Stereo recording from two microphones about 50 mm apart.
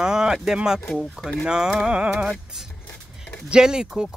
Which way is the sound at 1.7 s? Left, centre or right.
Centre.